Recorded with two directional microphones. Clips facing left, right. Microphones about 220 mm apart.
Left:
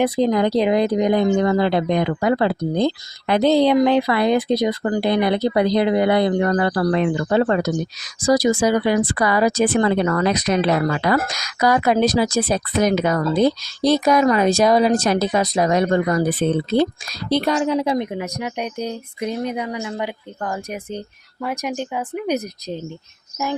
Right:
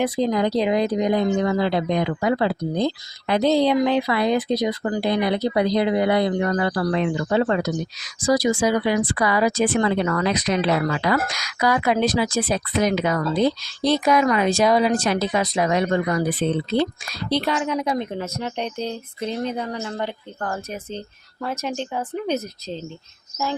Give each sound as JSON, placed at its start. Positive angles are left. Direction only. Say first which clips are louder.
{"t": 0.0, "sound": "speech", "louder": "left 3 dB", "side_deg": 60}
{"t": 17.6, "sound": "speech", "louder": "left 4 dB", "side_deg": 30}
{"t": 17.9, "sound": "speech", "louder": "left 3 dB", "side_deg": 15}